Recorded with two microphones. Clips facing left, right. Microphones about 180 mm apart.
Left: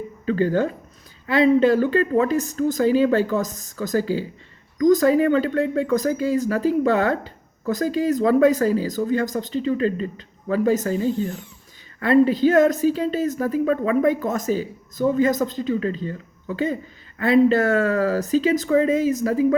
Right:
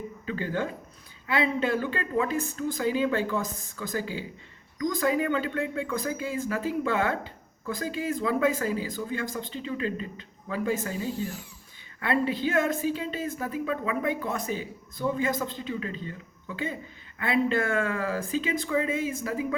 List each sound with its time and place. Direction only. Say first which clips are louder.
0.3 s speech: left 10 dB; 45° left (ahead or behind)